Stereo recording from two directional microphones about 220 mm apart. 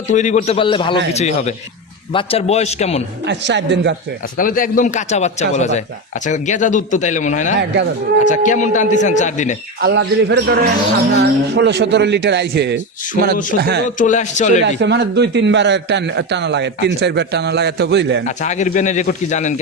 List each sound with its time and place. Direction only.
0.1 s a man's voice: 35° left (ahead or behind)
3.2 s a man's voice: 55° right (ahead or behind)
4.4 s a man's voice: 40° left (ahead or behind)
9.8 s a man's voice: 55° right (ahead or behind)
14.0 s a man's voice: 35° left (ahead or behind)
14.6 s a man's voice: 55° right (ahead or behind)
18.3 s a man's voice: 35° left (ahead or behind)